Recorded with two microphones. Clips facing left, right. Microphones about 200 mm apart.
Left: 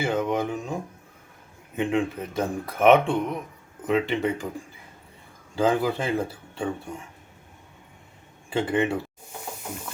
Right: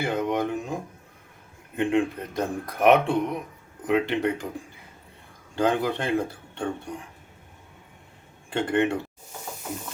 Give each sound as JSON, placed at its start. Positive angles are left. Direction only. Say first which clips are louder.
{"t": 0.0, "sound": "speech", "louder": "left 1 dB", "side_deg": 0}
{"t": 5.5, "sound": "speech", "louder": "left 1 dB", "side_deg": 5}
{"t": 8.4, "sound": "speech", "louder": "even", "side_deg": 5}